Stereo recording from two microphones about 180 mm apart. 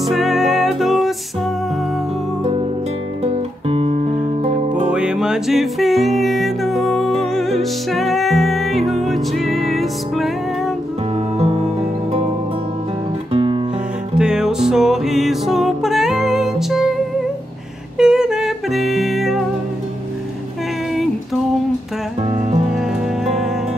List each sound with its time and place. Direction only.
0.0 s music: centre (ahead or behind)
3.6 s music: 35° right (ahead or behind)
4.8 s music: 5° right (ahead or behind)
13.3 s music: 30° right (ahead or behind)
14.1 s music: 5° right (ahead or behind)
17.9 s music: 5° right (ahead or behind)